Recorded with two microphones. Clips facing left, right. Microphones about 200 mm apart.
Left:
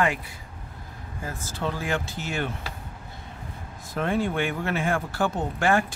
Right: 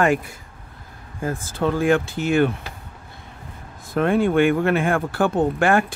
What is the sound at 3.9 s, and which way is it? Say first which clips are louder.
Speech: right 8 dB; 60° right (ahead or behind).